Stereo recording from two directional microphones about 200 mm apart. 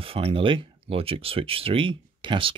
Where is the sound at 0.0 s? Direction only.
25° right (ahead or behind).